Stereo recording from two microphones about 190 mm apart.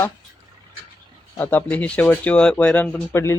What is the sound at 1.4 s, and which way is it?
Speech, 10° left (ahead or behind).